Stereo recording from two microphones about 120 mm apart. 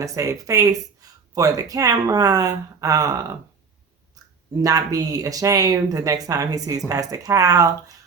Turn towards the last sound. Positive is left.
turn(degrees=-30)  # may be behind; listen again after turning